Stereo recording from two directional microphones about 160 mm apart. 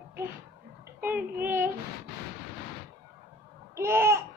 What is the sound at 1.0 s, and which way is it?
Speech, 15° right (ahead or behind).